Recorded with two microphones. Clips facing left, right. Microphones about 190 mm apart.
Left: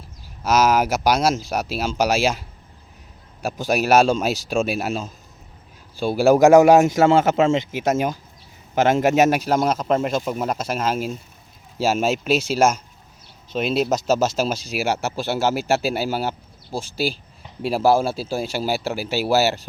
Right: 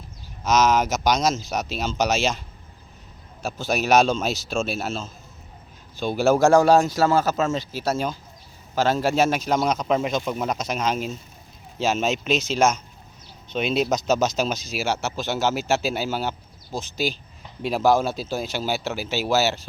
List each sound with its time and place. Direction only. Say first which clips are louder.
0.4 s speech: left 2 dB; 10° left (ahead or behind)
3.4 s a man's voice: left 3 dB; 10° left (ahead or behind)
9.0 s speech: left 4 dB; 15° left (ahead or behind)